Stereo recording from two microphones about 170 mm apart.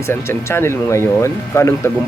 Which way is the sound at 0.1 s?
15° left (ahead or behind).